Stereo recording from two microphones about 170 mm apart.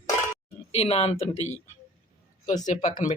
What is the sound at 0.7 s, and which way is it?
Speech, 40° left (ahead or behind).